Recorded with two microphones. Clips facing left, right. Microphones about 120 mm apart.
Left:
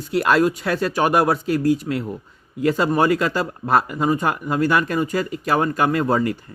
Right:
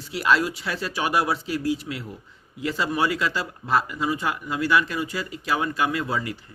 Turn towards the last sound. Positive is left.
turn(degrees=50)  # may be behind; listen again after turning